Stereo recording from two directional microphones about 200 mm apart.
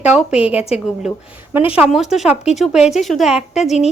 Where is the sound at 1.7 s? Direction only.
5° right (ahead or behind).